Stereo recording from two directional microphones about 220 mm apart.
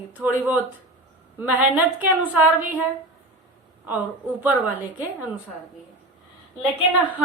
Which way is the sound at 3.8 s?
10° right (ahead or behind).